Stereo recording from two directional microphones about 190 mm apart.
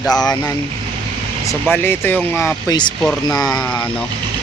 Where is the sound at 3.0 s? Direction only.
Centre (ahead or behind).